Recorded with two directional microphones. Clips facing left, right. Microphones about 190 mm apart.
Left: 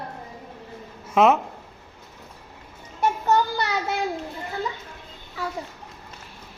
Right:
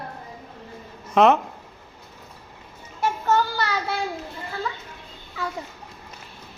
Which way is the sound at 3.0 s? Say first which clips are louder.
Left 1 dB; 15° left (ahead or behind).